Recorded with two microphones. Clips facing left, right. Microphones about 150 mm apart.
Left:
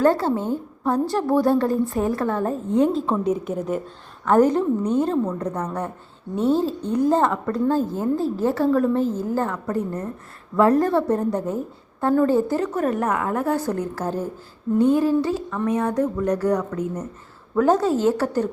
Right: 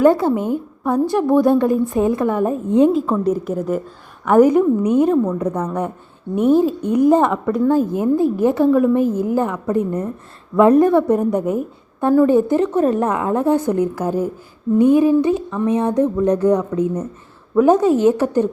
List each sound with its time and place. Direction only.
0.0 s a woman's voice: 15° right (ahead or behind)
3.1 s a woman's voice: 5° right (ahead or behind)